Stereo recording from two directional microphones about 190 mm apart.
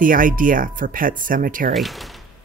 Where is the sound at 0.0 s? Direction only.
45° right (ahead or behind).